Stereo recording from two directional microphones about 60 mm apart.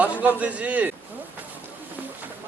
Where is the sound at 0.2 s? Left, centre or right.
Right.